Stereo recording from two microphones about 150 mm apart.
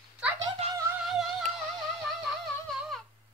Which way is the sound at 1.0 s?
Centre (ahead or behind).